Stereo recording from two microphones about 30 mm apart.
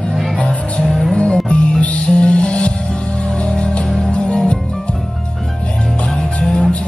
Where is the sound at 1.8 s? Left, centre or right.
Left.